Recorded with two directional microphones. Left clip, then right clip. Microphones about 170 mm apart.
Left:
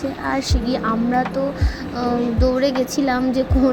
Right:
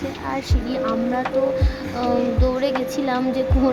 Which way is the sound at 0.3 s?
20° left (ahead or behind).